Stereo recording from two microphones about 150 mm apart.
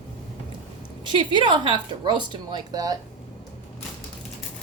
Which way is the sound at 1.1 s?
30° right (ahead or behind).